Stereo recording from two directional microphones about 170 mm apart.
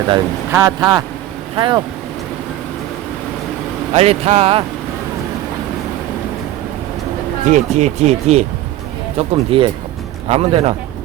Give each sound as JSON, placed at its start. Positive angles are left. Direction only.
{"t": 0.5, "sound": "speech", "side_deg": -20}
{"t": 3.9, "sound": "speech", "side_deg": -35}
{"t": 7.4, "sound": "speech", "side_deg": -45}